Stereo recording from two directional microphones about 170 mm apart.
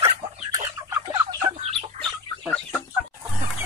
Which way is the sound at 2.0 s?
5° left (ahead or behind).